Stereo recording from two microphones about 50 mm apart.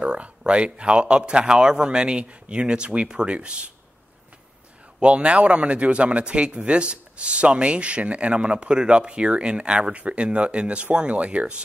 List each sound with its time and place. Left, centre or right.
0.0 s speech: centre
5.0 s speech: right